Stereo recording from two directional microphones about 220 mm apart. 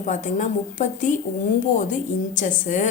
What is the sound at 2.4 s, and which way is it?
Speech, 35° left (ahead or behind).